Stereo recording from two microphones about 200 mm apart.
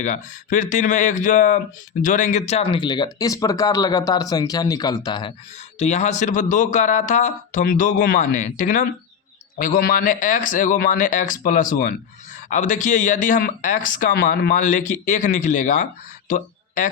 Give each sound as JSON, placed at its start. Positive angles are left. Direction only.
{"t": 0.0, "sound": "speech", "side_deg": 40}
{"t": 5.8, "sound": "speech", "side_deg": 35}